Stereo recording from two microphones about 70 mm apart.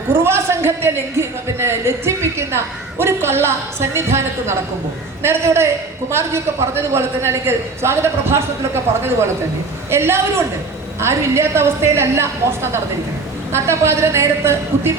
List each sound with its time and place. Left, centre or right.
0.2 s a man's voice: right
9.9 s a man's voice: right